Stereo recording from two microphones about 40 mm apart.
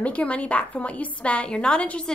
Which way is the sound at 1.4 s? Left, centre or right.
Left.